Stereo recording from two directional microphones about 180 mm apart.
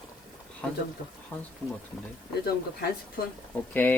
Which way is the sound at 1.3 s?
10° left (ahead or behind).